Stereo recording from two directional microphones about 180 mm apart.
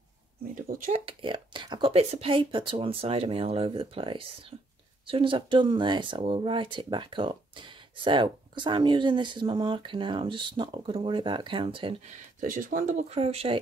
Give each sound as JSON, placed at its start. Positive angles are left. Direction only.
{"t": 0.9, "sound": "speech", "side_deg": -30}
{"t": 12.4, "sound": "speech", "side_deg": -50}